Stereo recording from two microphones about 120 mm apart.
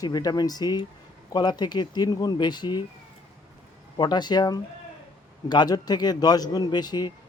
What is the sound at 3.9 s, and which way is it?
Speech, 35° left (ahead or behind).